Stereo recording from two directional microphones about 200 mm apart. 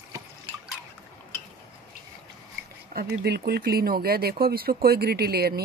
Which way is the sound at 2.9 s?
50° right (ahead or behind).